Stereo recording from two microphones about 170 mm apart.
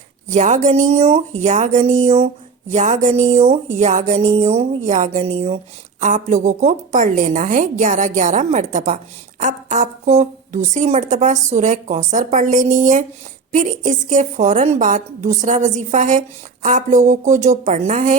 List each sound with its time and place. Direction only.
0.3 s a woman's voice: 45° right (ahead or behind)